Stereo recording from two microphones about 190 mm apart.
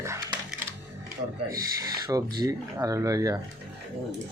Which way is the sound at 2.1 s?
20° right (ahead or behind).